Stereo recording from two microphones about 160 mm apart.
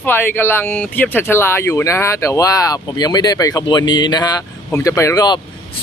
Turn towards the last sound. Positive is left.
turn(degrees=20)  # may be behind; listen again after turning